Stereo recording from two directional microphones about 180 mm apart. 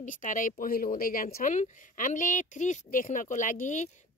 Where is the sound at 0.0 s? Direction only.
45° left (ahead or behind).